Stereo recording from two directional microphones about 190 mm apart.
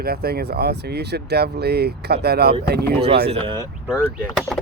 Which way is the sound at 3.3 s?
25° right (ahead or behind).